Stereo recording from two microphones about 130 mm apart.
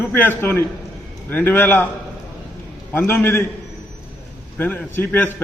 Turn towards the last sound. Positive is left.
turn(degrees=15)  # may be behind; listen again after turning